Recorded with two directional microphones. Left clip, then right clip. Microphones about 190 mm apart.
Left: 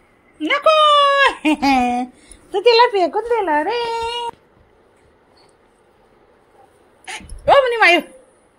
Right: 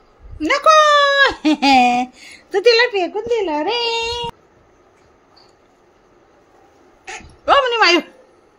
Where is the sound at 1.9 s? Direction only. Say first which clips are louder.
Right 4 dB; 25° right (ahead or behind).